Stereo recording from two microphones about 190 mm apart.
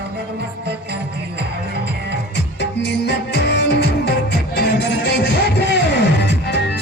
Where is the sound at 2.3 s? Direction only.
65° left (ahead or behind).